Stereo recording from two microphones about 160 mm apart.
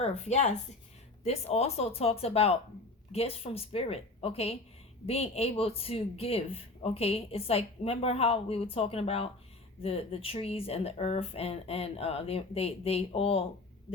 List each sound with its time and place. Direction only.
0.0 s speech: 45° left (ahead or behind)